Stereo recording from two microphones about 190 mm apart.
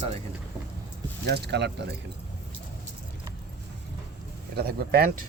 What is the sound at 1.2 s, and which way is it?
Speech, 60° right (ahead or behind).